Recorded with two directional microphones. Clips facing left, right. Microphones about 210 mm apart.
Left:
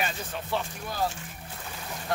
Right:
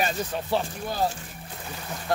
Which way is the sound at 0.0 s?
35° right (ahead or behind).